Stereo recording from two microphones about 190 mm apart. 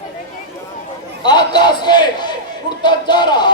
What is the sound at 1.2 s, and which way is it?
A man's voice, 20° left (ahead or behind).